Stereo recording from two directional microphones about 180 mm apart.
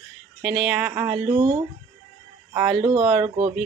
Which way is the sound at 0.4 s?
5° right (ahead or behind).